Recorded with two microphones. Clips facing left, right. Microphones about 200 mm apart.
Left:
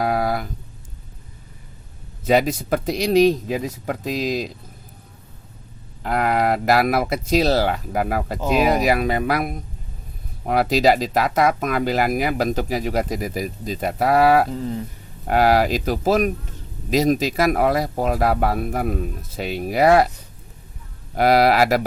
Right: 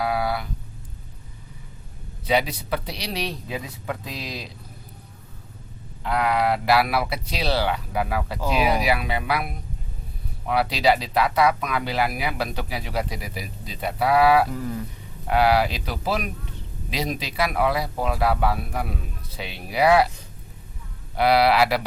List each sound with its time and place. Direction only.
0.0 s a sound: 45° left (ahead or behind)
2.2 s speech: 45° left (ahead or behind)
6.0 s speech: 45° left (ahead or behind)
14.5 s speech: 25° left (ahead or behind)
15.3 s speech: 45° left (ahead or behind)
21.2 s speech: 45° left (ahead or behind)